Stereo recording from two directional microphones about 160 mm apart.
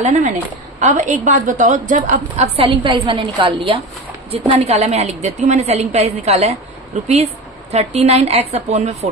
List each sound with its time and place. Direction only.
0.0 s a woman's voice: 55° right (ahead or behind); by 3.8 s 30° right (ahead or behind)
4.5 s a woman's voice: 45° right (ahead or behind)